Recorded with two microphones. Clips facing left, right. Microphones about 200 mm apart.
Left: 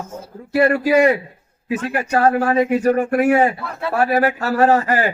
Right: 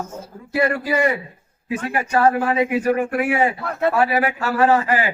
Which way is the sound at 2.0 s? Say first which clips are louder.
Left 1 dB; 45° left (ahead or behind).